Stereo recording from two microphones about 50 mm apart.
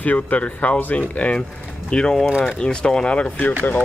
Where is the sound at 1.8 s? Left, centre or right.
Centre.